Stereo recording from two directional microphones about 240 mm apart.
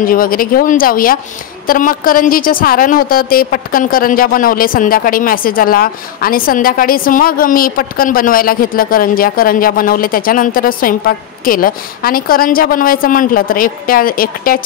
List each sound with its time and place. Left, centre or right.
0.0 s a woman's voice: left